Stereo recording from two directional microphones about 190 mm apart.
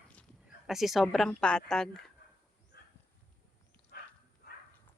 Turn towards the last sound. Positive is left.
turn(degrees=55)  # may be behind; listen again after turning